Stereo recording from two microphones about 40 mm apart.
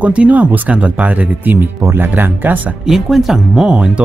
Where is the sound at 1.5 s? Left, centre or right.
Right.